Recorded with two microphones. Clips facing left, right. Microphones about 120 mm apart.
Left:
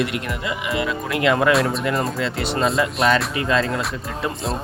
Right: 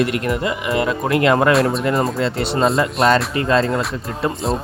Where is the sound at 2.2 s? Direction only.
35° right (ahead or behind).